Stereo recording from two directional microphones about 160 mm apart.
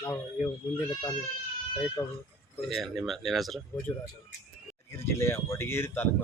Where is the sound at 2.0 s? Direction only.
15° left (ahead or behind).